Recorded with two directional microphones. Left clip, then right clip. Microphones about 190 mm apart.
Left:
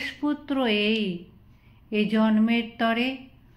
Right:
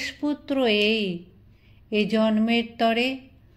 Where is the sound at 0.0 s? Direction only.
35° right (ahead or behind).